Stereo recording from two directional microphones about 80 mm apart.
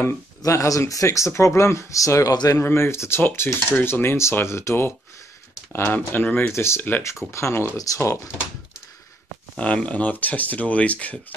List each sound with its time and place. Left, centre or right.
0.4 s cutlery: left
2.5 s cutlery: left
6.2 s speech: left
7.0 s cutlery: left
7.7 s speech: left
9.6 s speech: centre